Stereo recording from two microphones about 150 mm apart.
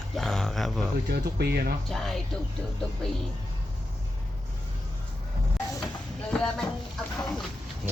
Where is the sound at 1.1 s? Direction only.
90° right.